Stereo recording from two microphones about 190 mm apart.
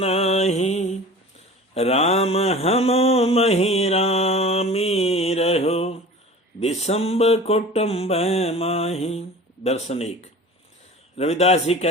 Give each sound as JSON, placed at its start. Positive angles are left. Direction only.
{"t": 0.0, "sound": "mantra", "side_deg": 35}